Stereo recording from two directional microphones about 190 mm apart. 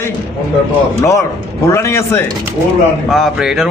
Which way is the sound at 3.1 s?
Centre (ahead or behind).